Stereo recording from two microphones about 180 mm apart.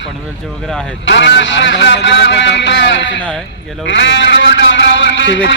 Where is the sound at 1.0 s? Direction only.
80° left.